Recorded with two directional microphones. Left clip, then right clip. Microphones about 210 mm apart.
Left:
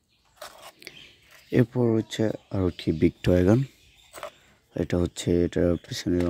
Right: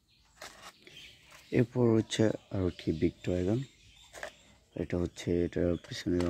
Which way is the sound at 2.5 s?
15° left (ahead or behind).